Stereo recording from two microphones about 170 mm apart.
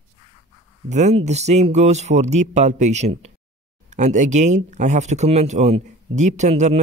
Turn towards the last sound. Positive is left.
turn(degrees=-40)  # may be behind; listen again after turning